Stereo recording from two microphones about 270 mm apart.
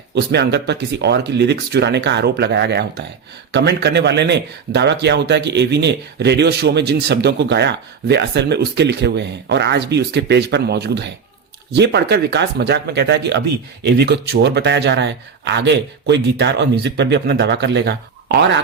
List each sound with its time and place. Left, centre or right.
0.1 s speech: right